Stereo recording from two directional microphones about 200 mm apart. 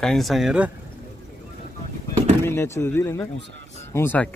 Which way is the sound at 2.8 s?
15° left (ahead or behind).